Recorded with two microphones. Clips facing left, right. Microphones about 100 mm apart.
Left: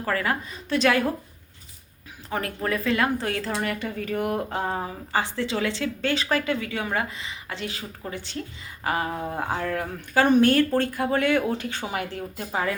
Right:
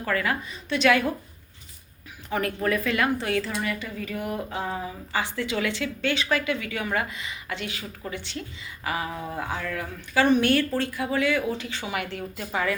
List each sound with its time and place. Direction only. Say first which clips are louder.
0.0 s speech: left 1 dB; 30° left (ahead or behind)
2.3 s speech: right 2 dB; 25° left (ahead or behind)
3.6 s speech: left 2 dB; 55° left (ahead or behind); by 12.7 s 35° left (ahead or behind)